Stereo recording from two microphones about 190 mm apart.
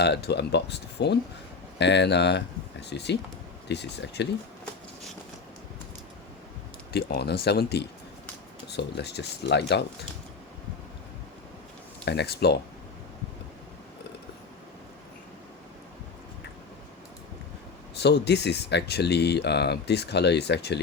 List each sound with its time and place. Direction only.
0.0 s speech: 60° left (ahead or behind)
6.9 s speech: 55° left (ahead or behind)
12.0 s speech: 60° left (ahead or behind)
17.9 s speech: 60° left (ahead or behind)